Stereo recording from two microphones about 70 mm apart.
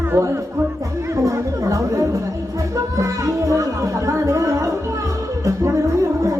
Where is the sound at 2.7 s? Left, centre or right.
Right.